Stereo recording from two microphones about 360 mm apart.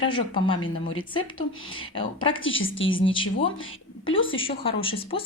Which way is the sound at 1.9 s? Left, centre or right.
Centre.